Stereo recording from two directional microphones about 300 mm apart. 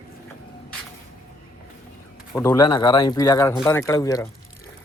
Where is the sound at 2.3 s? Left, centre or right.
Centre.